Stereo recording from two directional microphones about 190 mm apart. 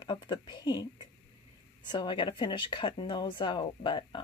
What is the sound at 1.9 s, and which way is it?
A woman's voice, 25° left (ahead or behind).